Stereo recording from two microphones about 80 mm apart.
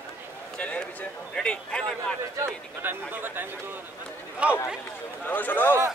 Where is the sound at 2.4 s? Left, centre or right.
Right.